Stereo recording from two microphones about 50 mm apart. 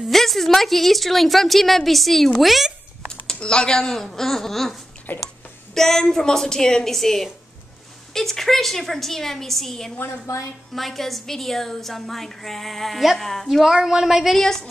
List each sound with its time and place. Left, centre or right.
0.1 s a woman's voice: centre
3.3 s a woman's voice: centre
5.1 s a sound: left
5.8 s a woman's voice: centre
9.9 s a woman's voice: left
10.7 s a woman's voice: centre
14.3 s a woman's voice: centre